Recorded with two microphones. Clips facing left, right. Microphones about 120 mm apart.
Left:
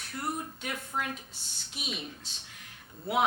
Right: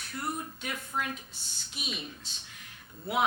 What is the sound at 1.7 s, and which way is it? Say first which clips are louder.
Speech: left 1 dB; 60° left (ahead or behind).